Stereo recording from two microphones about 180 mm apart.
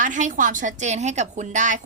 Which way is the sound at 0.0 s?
45° right (ahead or behind).